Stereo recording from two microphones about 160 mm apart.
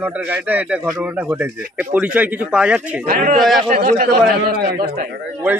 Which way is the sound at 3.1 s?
60° right (ahead or behind).